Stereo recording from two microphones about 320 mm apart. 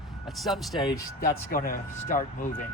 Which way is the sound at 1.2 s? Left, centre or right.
Left.